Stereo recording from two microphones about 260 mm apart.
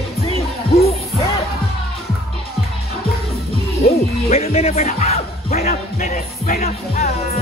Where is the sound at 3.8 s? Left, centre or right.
Left.